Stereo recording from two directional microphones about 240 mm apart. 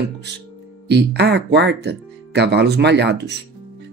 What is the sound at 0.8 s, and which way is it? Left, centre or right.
Speech, right.